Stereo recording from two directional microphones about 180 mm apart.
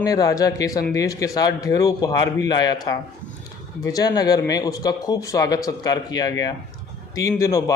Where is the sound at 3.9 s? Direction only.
20° left (ahead or behind).